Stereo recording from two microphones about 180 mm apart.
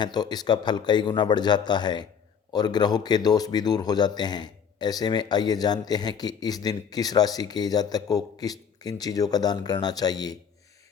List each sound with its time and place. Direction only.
0.0 s speech: 25° left (ahead or behind)